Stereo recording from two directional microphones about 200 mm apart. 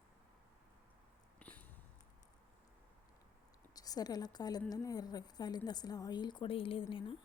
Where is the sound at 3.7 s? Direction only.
20° left (ahead or behind).